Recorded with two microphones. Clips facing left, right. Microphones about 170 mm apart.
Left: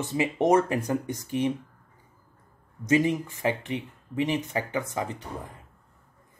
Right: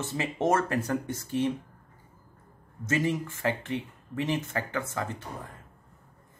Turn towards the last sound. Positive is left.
turn(degrees=15)  # may be behind; listen again after turning